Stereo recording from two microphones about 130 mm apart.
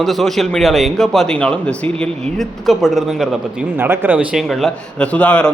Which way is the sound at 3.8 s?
15° right (ahead or behind).